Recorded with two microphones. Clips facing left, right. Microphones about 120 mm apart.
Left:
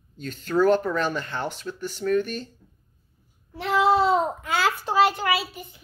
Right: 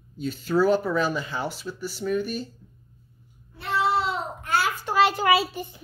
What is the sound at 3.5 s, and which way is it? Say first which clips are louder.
Child singing: left 4 dB; 90° left.